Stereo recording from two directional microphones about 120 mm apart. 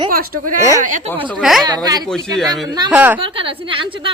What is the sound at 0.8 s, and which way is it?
Speech, 90° right.